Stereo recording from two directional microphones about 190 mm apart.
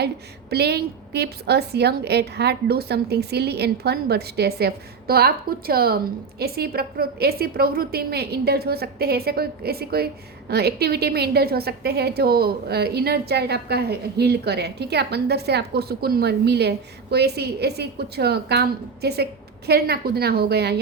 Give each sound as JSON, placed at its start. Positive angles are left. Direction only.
{"t": 0.5, "sound": "a woman's voice", "side_deg": -60}